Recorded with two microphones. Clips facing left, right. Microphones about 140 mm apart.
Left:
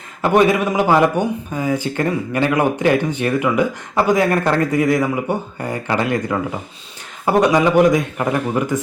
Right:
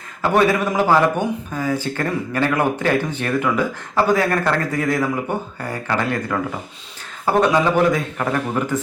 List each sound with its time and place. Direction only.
0.2 s speech: 20° left (ahead or behind)